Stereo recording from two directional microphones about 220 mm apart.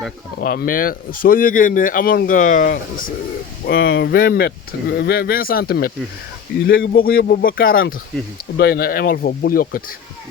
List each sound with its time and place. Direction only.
0.3 s speech: 40° left (ahead or behind)
3.7 s speech: 50° left (ahead or behind)